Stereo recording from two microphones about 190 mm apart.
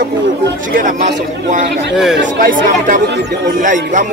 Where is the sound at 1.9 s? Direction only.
5° right (ahead or behind).